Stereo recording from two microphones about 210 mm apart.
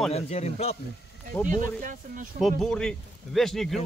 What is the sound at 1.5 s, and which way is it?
Speech, 40° right (ahead or behind).